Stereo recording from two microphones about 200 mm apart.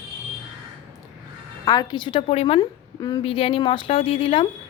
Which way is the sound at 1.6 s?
20° left (ahead or behind).